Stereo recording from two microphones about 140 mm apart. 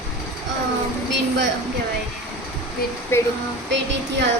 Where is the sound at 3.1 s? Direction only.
15° left (ahead or behind).